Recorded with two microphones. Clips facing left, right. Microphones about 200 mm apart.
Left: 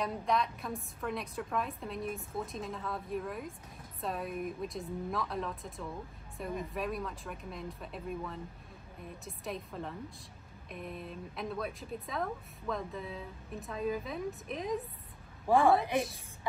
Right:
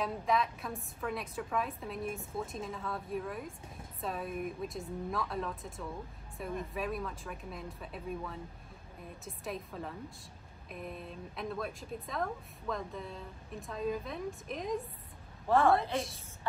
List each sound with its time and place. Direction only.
0.0 s a woman's voice: centre (ahead or behind)
15.4 s a woman's voice: 15° left (ahead or behind)